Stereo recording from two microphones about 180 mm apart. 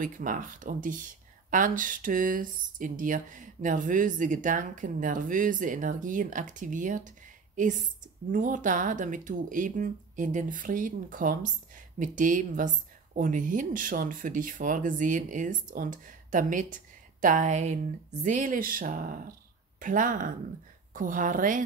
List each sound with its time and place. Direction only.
0.0 s speech: 45° right (ahead or behind)